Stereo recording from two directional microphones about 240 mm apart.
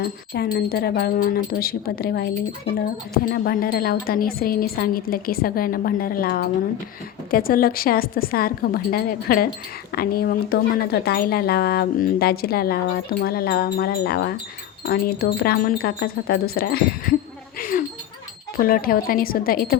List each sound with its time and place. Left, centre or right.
0.5 s speech: left
3.3 s speech: left
17.6 s a sound: left
18.5 s speech: left